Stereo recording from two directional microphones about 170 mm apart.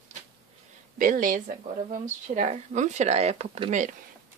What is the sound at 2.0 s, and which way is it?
Speech, 45° right (ahead or behind).